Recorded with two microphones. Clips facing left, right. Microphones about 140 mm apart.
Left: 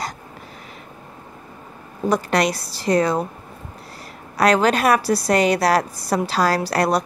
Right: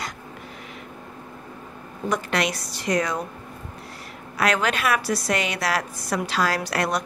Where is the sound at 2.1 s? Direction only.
35° left (ahead or behind).